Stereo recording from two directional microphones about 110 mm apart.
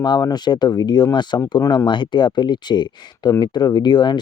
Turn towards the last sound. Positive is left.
turn(degrees=45)  # may be behind; listen again after turning